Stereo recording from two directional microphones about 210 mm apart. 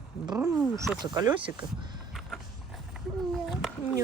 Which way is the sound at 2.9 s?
Centre (ahead or behind).